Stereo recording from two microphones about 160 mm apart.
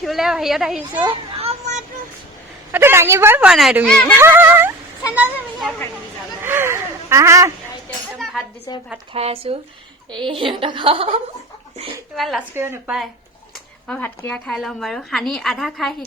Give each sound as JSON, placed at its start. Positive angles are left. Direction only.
{"t": 0.0, "sound": "a woman's voice", "side_deg": 0}
{"t": 1.0, "sound": "children playing", "side_deg": -40}
{"t": 2.7, "sound": "a woman's voice", "side_deg": -15}
{"t": 3.8, "sound": "speech", "side_deg": 5}
{"t": 4.2, "sound": "a woman's voice", "side_deg": -15}
{"t": 8.2, "sound": "cutlery", "side_deg": 0}
{"t": 8.7, "sound": "speech", "side_deg": 25}
{"t": 9.1, "sound": "a woman's voice", "side_deg": -40}
{"t": 12.1, "sound": "a woman's voice", "side_deg": 0}
{"t": 12.5, "sound": "a woman's voice", "side_deg": -15}
{"t": 13.8, "sound": "a woman's voice", "side_deg": 10}